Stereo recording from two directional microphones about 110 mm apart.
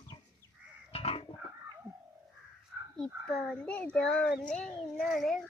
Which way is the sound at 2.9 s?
5° left (ahead or behind).